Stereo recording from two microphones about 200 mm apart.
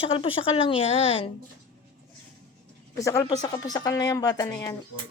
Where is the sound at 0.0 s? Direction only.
25° left (ahead or behind).